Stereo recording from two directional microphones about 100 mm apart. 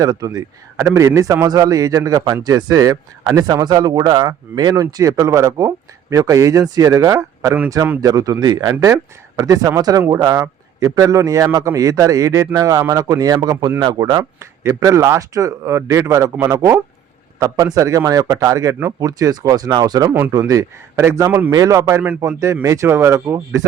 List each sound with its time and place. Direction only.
0.0 s a man's voice: 40° right (ahead or behind)
14.2 s a man's voice: 30° right (ahead or behind)
19.0 s a man's voice: 35° right (ahead or behind)
20.1 s speech: 20° right (ahead or behind)
20.5 s a man's voice: 35° right (ahead or behind)